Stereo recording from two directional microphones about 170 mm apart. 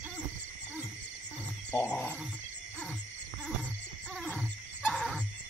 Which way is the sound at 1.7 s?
10° left (ahead or behind).